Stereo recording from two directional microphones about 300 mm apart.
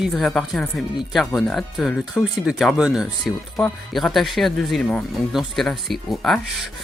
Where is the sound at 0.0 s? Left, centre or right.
Centre.